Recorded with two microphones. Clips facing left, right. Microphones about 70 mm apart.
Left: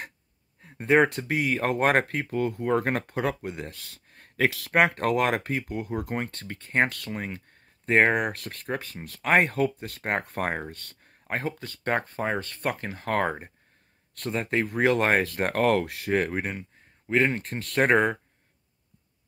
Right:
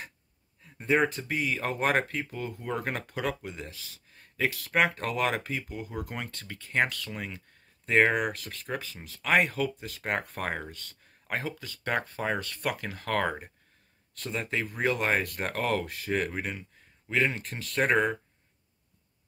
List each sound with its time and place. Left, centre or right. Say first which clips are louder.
0.6 s speech: left 5 dB; left
11.2 s speech: left 3 dB; left
11.5 s speech: left 4 dB; left
11.9 s speech: left 3 dB; left
14.3 s speech: left 5 dB; left
14.8 s speech: left 5 dB; left
17.6 s speech: left 4 dB; left